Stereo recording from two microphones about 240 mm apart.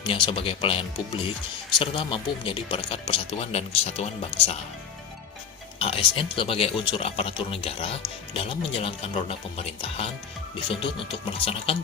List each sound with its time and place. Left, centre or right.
0.0 s speech: left
5.8 s speech: left